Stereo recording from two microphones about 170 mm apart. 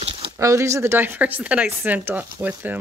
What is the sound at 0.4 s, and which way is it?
Speech, 15° right (ahead or behind).